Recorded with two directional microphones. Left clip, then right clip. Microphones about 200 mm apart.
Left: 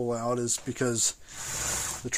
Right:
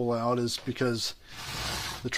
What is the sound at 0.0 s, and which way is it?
Speech, 5° right (ahead or behind).